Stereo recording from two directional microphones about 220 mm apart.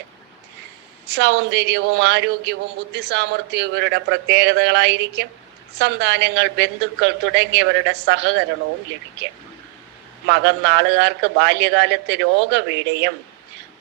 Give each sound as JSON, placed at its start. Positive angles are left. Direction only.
{"t": 1.0, "sound": "speech", "side_deg": -50}
{"t": 10.2, "sound": "speech", "side_deg": -55}